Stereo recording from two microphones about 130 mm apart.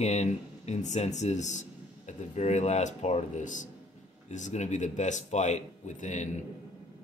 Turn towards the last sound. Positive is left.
turn(degrees=65)  # may be behind; listen again after turning